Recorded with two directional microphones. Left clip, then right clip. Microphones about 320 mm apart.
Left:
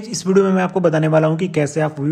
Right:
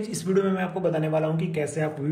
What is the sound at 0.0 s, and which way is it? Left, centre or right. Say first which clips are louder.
Speech: left 9 dB; centre.